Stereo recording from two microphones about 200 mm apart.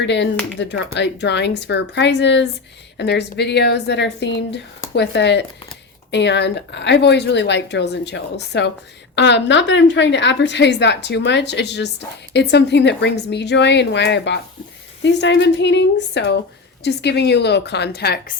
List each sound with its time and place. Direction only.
0.0 s a woman's voice: 60° left (ahead or behind)